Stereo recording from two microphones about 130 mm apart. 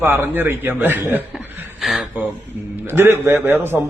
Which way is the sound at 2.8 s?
15° right (ahead or behind).